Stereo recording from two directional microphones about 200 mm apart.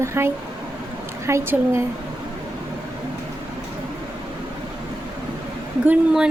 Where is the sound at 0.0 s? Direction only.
15° right (ahead or behind).